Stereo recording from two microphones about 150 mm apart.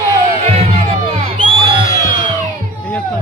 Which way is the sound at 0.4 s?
40° right (ahead or behind).